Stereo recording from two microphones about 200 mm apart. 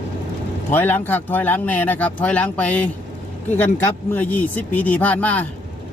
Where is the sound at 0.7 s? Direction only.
10° left (ahead or behind).